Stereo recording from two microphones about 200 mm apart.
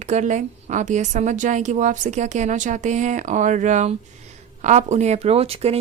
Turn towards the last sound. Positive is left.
turn(degrees=-30)  # may be behind; listen again after turning